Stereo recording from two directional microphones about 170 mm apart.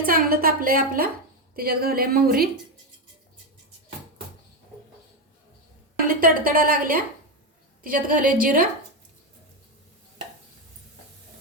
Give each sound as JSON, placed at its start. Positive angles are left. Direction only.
{"t": 0.0, "sound": "a woman's voice", "side_deg": -60}
{"t": 6.1, "sound": "a woman's voice", "side_deg": -55}